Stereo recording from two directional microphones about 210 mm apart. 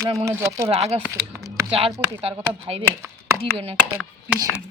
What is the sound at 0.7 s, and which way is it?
Speech, 30° right (ahead or behind).